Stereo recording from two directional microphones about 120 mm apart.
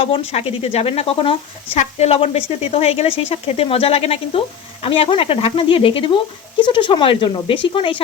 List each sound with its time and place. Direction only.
0.0 s speech: 55° left (ahead or behind)
1.8 s speech: 60° left (ahead or behind); by 8.0 s 45° left (ahead or behind)